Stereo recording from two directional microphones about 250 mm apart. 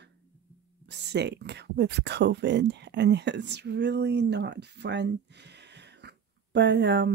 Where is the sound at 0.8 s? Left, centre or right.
Right.